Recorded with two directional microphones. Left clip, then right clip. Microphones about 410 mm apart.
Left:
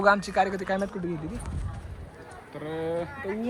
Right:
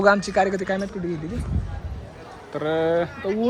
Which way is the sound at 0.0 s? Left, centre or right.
Centre.